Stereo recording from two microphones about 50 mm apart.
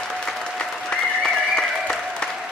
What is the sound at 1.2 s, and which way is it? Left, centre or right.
Applause, centre.